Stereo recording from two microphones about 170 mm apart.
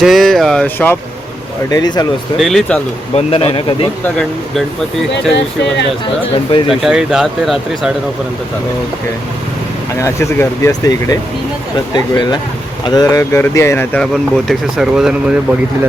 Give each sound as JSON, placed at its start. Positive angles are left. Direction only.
{"t": 0.0, "sound": "speech", "side_deg": 0}
{"t": 1.7, "sound": "speech", "side_deg": 25}
{"t": 2.4, "sound": "speech", "side_deg": 0}
{"t": 3.2, "sound": "speech", "side_deg": 35}
{"t": 4.0, "sound": "speech", "side_deg": 5}
{"t": 6.3, "sound": "speech", "side_deg": 30}
{"t": 6.7, "sound": "speech", "side_deg": -5}
{"t": 10.0, "sound": "speech", "side_deg": 15}